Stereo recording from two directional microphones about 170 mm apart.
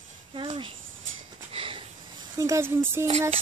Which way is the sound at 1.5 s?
30° right (ahead or behind).